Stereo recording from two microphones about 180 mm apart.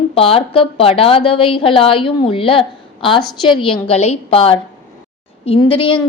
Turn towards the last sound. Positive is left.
turn(degrees=30)  # may be behind; listen again after turning